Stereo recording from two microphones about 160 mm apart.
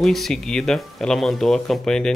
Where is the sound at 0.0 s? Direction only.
Centre (ahead or behind).